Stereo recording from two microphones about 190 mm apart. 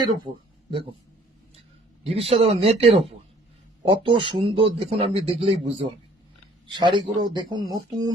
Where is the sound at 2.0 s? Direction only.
30° right (ahead or behind).